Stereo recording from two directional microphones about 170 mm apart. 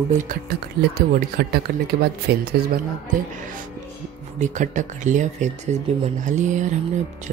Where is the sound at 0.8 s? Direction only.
75° right (ahead or behind).